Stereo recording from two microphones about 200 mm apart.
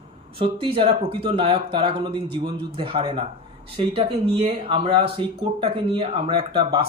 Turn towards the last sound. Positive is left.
turn(degrees=-30)  # may be behind; listen again after turning